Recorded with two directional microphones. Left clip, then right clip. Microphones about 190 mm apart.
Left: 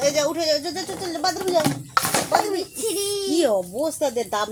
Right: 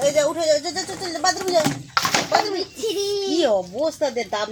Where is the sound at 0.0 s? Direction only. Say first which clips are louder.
Right 2 dB; 20° left (ahead or behind).